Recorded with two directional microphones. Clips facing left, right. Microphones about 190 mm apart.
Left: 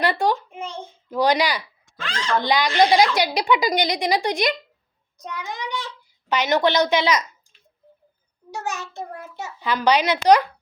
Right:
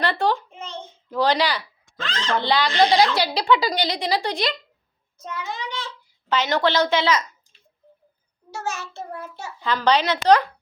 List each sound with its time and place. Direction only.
0.0 s a child's voice: 10° left (ahead or behind)
8.4 s a woman's voice: 15° left (ahead or behind)